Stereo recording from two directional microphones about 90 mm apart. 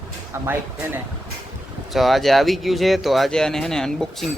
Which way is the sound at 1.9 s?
Centre (ahead or behind).